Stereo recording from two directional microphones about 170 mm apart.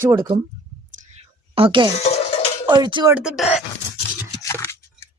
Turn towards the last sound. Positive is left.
turn(degrees=15)  # may be behind; listen again after turning